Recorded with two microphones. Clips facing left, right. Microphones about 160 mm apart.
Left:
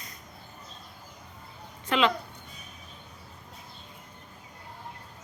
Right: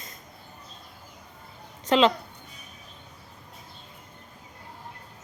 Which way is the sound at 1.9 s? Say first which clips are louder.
Right 5 dB; 25° right (ahead or behind).